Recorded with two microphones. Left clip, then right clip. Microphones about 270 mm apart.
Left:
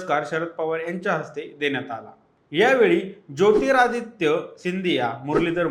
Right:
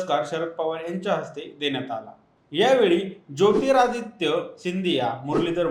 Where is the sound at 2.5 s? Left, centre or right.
Left.